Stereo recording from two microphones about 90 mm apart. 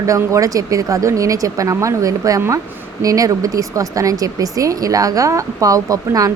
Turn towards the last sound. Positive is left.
turn(degrees=-40)  # may be behind; listen again after turning